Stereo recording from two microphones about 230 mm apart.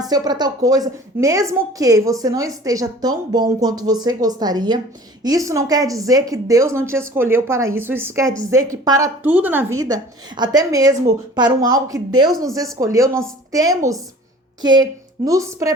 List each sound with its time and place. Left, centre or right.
0.0 s a woman's voice: centre
11.9 s speech: right
12.7 s a woman's voice: centre